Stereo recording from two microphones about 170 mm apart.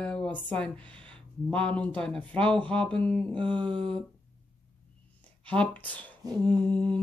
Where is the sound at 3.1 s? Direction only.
30° right (ahead or behind).